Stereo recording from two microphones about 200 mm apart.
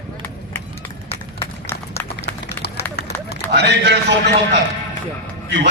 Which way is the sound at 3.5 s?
55° right (ahead or behind).